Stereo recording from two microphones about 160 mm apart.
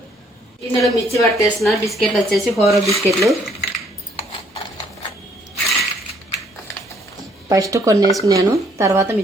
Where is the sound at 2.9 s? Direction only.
20° left (ahead or behind).